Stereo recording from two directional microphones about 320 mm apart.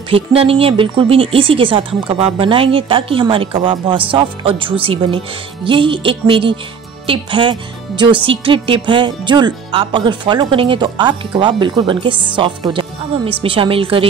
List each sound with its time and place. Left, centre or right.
0.1 s speech: centre